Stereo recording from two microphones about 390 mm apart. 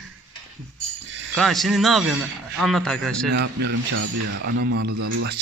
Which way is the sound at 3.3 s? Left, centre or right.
Right.